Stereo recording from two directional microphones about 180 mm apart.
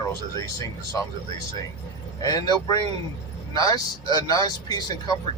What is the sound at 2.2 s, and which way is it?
Speech, 20° left (ahead or behind).